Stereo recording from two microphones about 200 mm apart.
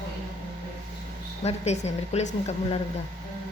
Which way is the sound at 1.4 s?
35° left (ahead or behind).